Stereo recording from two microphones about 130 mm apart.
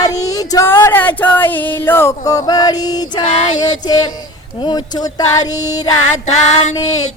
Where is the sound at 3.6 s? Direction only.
30° left (ahead or behind).